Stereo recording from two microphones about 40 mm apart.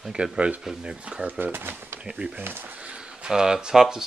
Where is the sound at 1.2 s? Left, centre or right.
Right.